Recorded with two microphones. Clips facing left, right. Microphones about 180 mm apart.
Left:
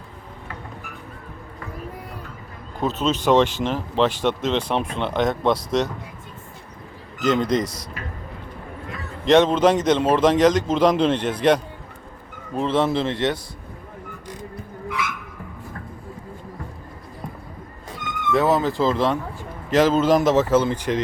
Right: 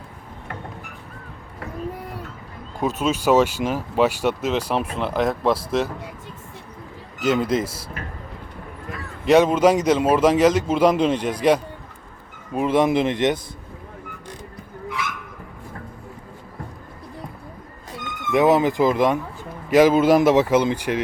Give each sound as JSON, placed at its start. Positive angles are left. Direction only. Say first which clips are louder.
{"t": 2.8, "sound": "speech", "louder": "even", "side_deg": -10}
{"t": 7.2, "sound": "a man's voice", "louder": "even", "side_deg": -5}
{"t": 9.2, "sound": "speech", "louder": "right 1 dB", "side_deg": -10}
{"t": 18.3, "sound": "speech", "louder": "right 3 dB", "side_deg": -15}